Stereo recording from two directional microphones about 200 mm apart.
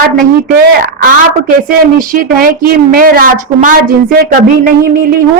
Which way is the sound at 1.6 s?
40° right (ahead or behind).